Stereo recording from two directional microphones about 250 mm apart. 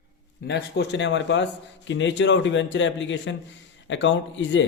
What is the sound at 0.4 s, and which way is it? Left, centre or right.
A man's voice, left.